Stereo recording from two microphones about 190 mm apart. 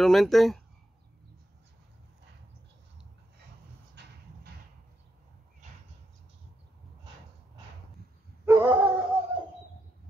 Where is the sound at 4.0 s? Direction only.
65° right (ahead or behind).